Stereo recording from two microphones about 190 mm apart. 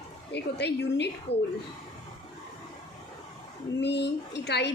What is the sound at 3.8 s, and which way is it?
Speech, 65° left (ahead or behind).